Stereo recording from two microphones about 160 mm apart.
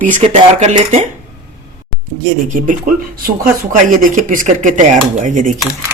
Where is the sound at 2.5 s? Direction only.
55° right (ahead or behind).